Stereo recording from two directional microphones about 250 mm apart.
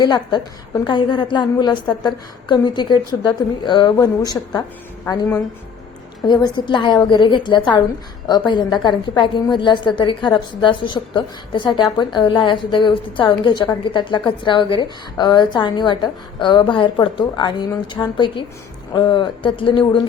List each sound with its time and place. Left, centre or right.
0.0 s a woman's voice: centre